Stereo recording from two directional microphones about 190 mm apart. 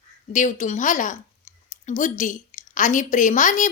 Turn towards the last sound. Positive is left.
turn(degrees=40)  # may be behind; listen again after turning